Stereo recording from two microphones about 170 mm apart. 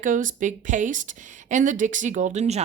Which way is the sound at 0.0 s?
50° right (ahead or behind).